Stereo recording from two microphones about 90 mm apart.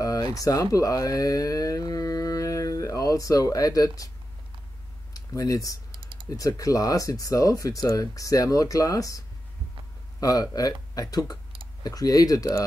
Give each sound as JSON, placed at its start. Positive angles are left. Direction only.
{"t": 0.0, "sound": "speech", "side_deg": 40}
{"t": 5.1, "sound": "speech", "side_deg": 40}
{"t": 5.9, "sound": "typing", "side_deg": -70}
{"t": 6.3, "sound": "speech", "side_deg": 40}
{"t": 10.2, "sound": "speech", "side_deg": 40}